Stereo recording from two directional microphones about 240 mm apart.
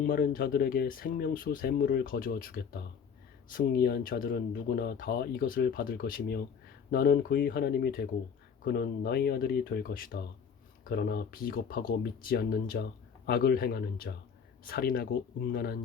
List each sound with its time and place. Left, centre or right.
0.0 s speech: left